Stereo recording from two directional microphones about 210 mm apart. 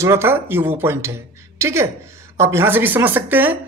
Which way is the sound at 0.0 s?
10° right (ahead or behind).